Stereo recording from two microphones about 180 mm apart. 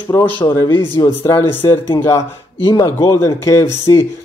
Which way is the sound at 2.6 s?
25° left (ahead or behind).